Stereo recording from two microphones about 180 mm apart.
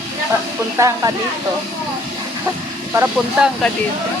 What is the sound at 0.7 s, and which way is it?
Speech, 15° right (ahead or behind).